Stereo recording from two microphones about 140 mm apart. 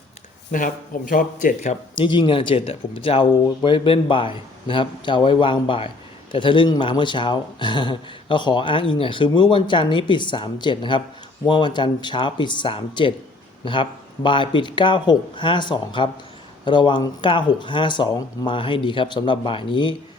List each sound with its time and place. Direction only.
0.5 s speech: 75° left (ahead or behind)
2.0 s speech: 35° left (ahead or behind)